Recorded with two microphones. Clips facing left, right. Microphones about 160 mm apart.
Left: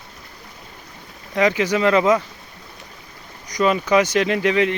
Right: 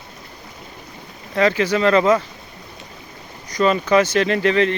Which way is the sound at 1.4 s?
15° left (ahead or behind).